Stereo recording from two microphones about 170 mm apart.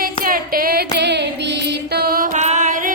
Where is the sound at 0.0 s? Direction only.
60° right (ahead or behind).